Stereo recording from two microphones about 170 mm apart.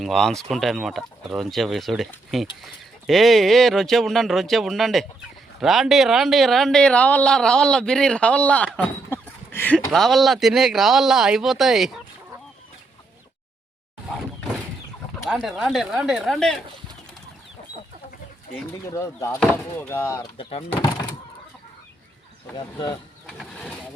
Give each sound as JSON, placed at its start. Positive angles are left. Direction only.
{"t": 0.0, "sound": "speech", "side_deg": 0}
{"t": 15.2, "sound": "speech", "side_deg": 0}
{"t": 18.9, "sound": "speech", "side_deg": 15}
{"t": 20.4, "sound": "speech", "side_deg": 40}
{"t": 22.5, "sound": "speech", "side_deg": 25}
{"t": 23.2, "sound": "speech", "side_deg": 0}